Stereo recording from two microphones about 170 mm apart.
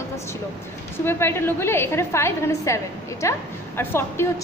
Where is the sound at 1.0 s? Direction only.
15° left (ahead or behind).